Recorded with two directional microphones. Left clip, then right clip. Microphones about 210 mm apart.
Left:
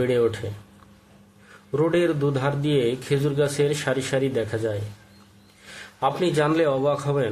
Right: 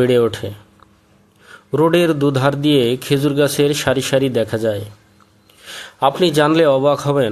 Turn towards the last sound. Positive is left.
turn(degrees=-35)  # may be behind; listen again after turning